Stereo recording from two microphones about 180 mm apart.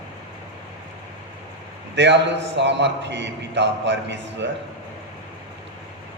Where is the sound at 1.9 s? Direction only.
75° right (ahead or behind).